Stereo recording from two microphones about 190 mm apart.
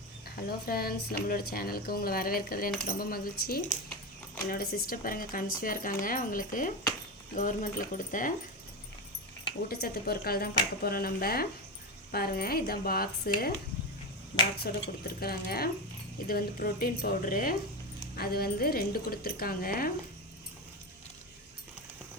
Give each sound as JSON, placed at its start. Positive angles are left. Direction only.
{"t": 0.3, "sound": "speech", "side_deg": 55}
{"t": 9.6, "sound": "speech", "side_deg": 55}
{"t": 14.6, "sound": "speech", "side_deg": 55}